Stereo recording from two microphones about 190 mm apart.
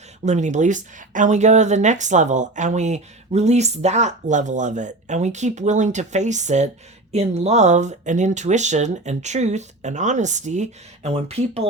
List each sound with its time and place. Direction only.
0.3 s speech: 40° right (ahead or behind)